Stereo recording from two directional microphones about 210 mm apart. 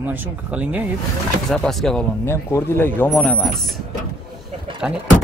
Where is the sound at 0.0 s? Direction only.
10° right (ahead or behind).